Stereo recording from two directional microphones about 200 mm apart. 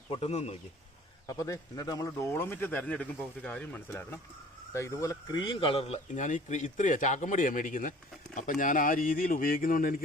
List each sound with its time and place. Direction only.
0.1 s speech: 30° left (ahead or behind)
1.3 s speech: 15° left (ahead or behind); by 9.9 s 45° left (ahead or behind)